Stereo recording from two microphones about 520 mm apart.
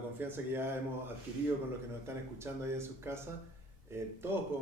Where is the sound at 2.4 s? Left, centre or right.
Centre.